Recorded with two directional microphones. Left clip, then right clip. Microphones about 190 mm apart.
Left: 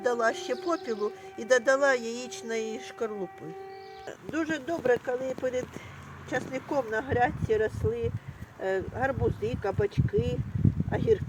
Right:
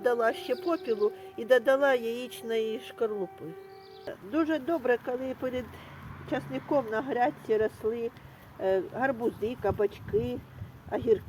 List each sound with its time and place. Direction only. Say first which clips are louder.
0.0 s speech: even; 30° right (ahead or behind)
4.0 s speech: right 3 dB; 40° right (ahead or behind)